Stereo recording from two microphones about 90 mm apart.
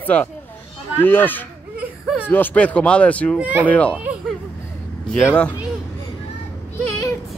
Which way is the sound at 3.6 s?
15° left (ahead or behind).